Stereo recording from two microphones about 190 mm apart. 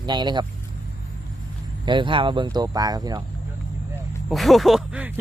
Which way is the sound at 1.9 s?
25° right (ahead or behind).